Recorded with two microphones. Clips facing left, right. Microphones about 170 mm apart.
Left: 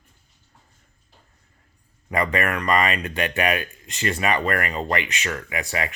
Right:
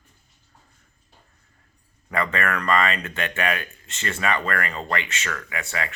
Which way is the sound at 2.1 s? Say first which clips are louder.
Left 2 dB; 15° left (ahead or behind).